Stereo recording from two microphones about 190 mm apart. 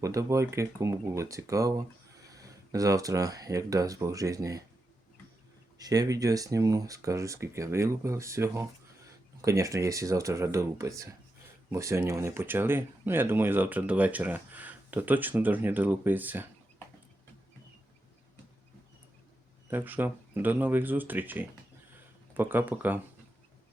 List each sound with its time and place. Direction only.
0.0 s speech: 15° right (ahead or behind)
5.8 s speech: 20° right (ahead or behind)
19.7 s speech: 10° right (ahead or behind)